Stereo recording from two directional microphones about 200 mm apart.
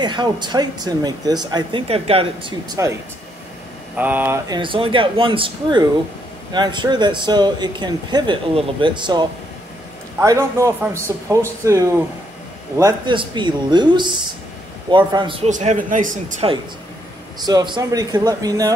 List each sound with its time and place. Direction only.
0.0 s a man's voice: 20° right (ahead or behind)
4.6 s a man's voice: 25° right (ahead or behind)
17.4 s speech: 20° right (ahead or behind)